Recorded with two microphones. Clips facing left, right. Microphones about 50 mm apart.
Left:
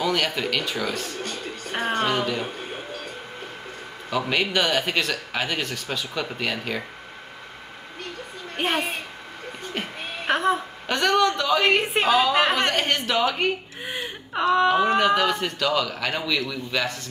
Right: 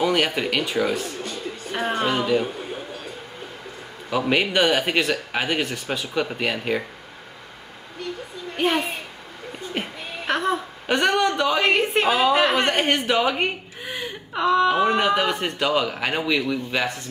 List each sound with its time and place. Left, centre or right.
0.0 s speech: centre
0.9 s a sound: left
1.8 s speech: centre
4.1 s speech: centre
8.6 s a child's voice: centre
10.2 s a sound: centre
10.9 s speech: centre
11.6 s speech: centre
12.1 s speech: centre
13.8 s wail: centre
14.7 s speech: centre
15.4 s speech: right